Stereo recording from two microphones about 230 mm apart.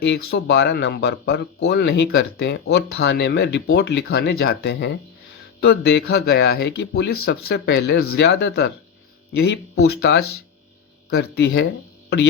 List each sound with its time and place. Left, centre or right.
0.0 s speech: left